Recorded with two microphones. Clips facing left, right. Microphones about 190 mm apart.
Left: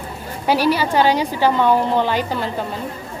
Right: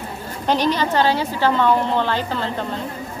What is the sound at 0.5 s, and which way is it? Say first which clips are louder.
A woman's voice: left 2 dB; 10° left (ahead or behind).